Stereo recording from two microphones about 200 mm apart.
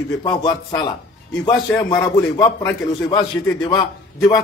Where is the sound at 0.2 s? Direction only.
20° left (ahead or behind).